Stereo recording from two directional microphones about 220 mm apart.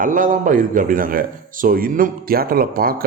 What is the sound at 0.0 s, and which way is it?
Speech, 35° right (ahead or behind).